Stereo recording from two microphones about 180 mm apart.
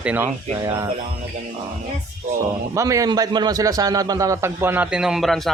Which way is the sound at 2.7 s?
20° right (ahead or behind).